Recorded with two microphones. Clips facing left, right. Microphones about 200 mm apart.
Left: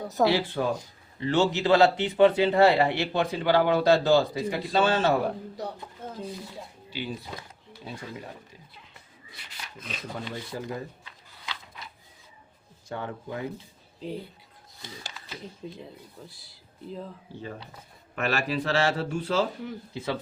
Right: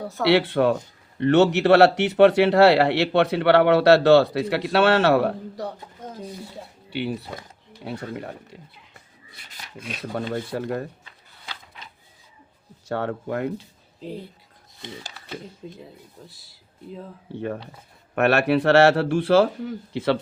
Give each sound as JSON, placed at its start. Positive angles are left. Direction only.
{"t": 0.3, "sound": "speech", "side_deg": -70}
{"t": 6.9, "sound": "speech", "side_deg": -65}
{"t": 10.5, "sound": "speech", "side_deg": -65}
{"t": 12.9, "sound": "speech", "side_deg": -70}
{"t": 15.6, "sound": "speech", "side_deg": 0}
{"t": 17.3, "sound": "speech", "side_deg": -60}